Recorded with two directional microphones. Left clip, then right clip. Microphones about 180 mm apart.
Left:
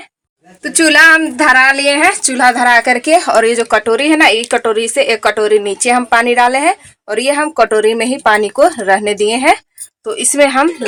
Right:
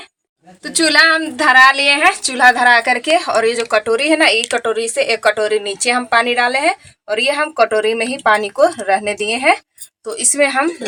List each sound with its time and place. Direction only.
0.9 s speech: 50° left (ahead or behind)